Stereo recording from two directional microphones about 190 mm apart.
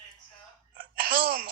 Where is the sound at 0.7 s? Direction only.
50° right (ahead or behind).